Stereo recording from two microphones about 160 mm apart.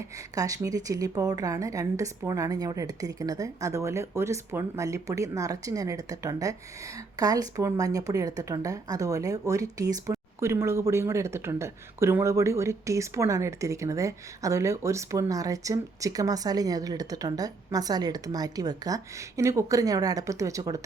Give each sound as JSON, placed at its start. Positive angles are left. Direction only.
{"t": 0.3, "sound": "speech", "side_deg": -20}